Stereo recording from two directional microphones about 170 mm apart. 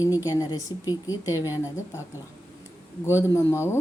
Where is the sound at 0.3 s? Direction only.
20° left (ahead or behind).